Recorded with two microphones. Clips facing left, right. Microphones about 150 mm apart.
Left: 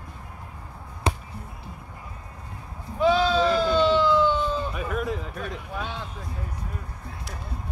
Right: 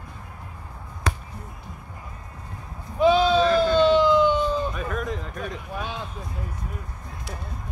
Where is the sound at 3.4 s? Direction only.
15° left (ahead or behind).